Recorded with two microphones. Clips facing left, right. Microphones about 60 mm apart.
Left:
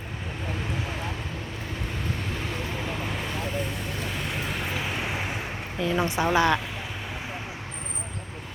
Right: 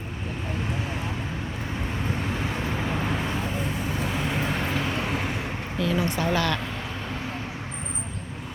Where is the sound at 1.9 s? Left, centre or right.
Centre.